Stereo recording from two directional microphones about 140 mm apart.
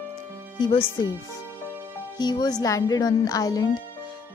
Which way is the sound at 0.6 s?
35° left (ahead or behind).